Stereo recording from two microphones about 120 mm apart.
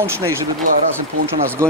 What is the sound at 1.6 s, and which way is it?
Speech, 25° right (ahead or behind).